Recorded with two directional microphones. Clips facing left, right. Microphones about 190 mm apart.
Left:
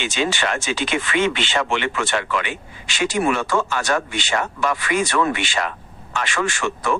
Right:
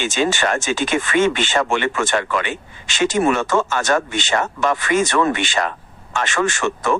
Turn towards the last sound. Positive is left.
turn(degrees=-45)  # may be behind; listen again after turning